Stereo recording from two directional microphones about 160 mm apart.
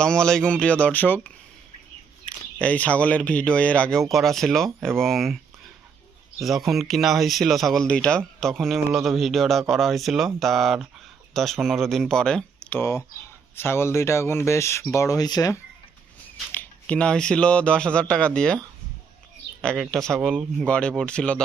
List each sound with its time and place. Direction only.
0.0 s speech: 5° left (ahead or behind)
6.4 s speech: centre (ahead or behind)
13.6 s speech: 15° left (ahead or behind)
16.5 s speech: 10° left (ahead or behind)
19.6 s speech: 5° left (ahead or behind)